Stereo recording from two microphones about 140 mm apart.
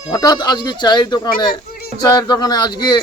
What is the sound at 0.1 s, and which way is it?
A man's voice, 30° left (ahead or behind).